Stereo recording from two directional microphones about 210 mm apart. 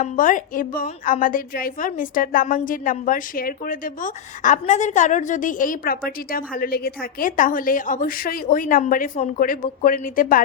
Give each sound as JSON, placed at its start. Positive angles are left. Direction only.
{"t": 0.0, "sound": "a woman's voice", "side_deg": 40}